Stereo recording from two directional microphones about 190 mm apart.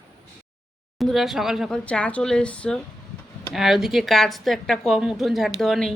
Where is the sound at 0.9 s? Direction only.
Centre (ahead or behind).